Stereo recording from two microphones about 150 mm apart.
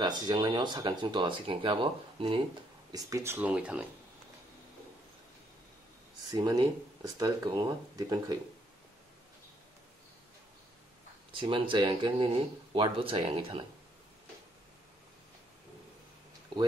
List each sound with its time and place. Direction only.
0.0 s speech: 30° right (ahead or behind)
2.9 s speech: 20° right (ahead or behind)
6.3 s speech: 25° right (ahead or behind)
11.3 s speech: 35° right (ahead or behind)